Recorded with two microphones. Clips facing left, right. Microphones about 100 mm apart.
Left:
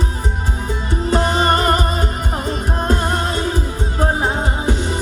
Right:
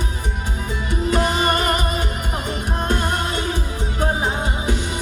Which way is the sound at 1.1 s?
35° left (ahead or behind).